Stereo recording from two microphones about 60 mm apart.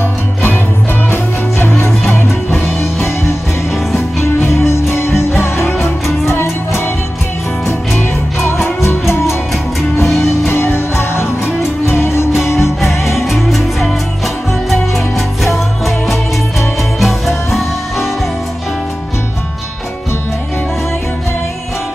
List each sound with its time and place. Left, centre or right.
1.1 s music: left
4.5 s music: left
5.8 s music: centre
8.5 s music: left
10.5 s music: left
13.2 s music: centre